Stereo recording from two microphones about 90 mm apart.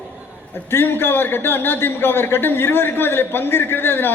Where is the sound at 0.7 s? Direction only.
25° left (ahead or behind).